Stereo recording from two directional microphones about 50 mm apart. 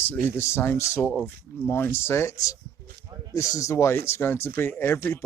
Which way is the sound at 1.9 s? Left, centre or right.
Left.